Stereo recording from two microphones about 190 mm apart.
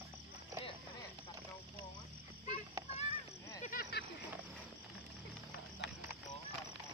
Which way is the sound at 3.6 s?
50° left (ahead or behind).